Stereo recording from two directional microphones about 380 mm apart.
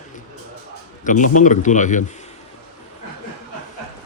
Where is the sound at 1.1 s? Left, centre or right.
Centre.